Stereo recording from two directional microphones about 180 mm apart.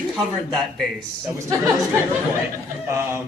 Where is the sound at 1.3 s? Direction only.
15° right (ahead or behind).